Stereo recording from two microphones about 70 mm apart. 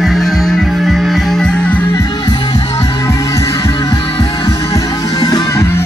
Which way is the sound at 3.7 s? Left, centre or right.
Left.